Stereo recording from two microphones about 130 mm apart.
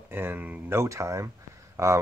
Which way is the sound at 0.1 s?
15° right (ahead or behind).